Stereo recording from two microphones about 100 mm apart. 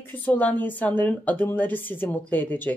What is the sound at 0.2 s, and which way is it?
A woman's voice, 15° left (ahead or behind).